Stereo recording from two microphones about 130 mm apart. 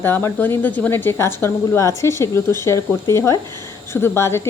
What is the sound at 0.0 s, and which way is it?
A woman's voice, 15° left (ahead or behind).